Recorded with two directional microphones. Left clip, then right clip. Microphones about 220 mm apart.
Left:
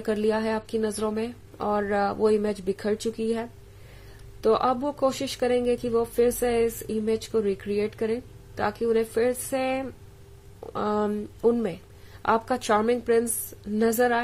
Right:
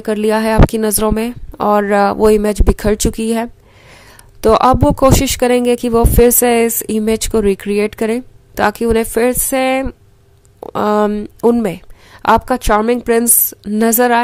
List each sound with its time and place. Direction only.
0.0 s speech: 35° right (ahead or behind)